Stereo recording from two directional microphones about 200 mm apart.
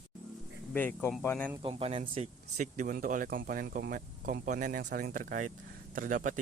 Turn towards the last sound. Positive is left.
turn(degrees=-40)  # may be behind; listen again after turning